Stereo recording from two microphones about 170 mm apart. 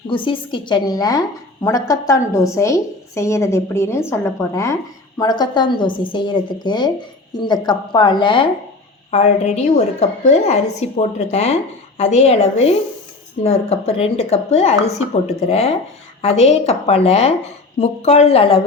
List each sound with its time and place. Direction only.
0.1 s a woman's voice: 30° left (ahead or behind)
9.0 s a woman's voice: 40° left (ahead or behind)